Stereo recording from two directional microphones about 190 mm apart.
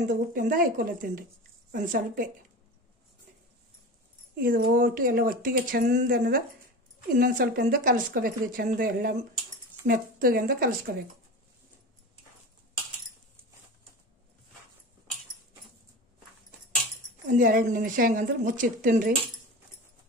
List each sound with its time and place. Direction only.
0.0 s a woman's voice: 45° right (ahead or behind)
4.4 s a woman's voice: 50° right (ahead or behind)
17.3 s a woman's voice: 50° right (ahead or behind)